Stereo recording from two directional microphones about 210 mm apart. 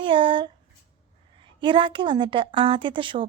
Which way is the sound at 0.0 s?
25° right (ahead or behind).